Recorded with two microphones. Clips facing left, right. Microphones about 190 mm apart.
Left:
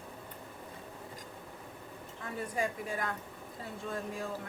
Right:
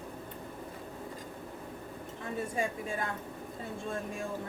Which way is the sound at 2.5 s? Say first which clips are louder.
Left 2 dB; 25° right (ahead or behind).